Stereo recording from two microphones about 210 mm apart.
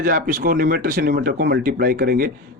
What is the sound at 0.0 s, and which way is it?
Speech, 40° right (ahead or behind).